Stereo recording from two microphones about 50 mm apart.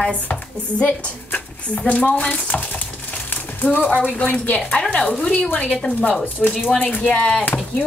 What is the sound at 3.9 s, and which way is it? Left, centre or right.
Speech, left.